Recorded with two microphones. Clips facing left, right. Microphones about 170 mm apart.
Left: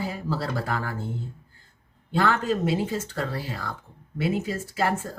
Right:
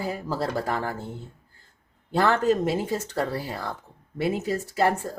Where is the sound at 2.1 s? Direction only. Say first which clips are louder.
Right 3 dB; 40° right (ahead or behind).